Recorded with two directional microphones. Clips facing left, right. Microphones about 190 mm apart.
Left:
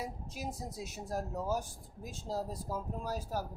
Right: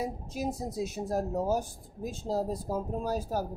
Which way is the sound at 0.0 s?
20° right (ahead or behind).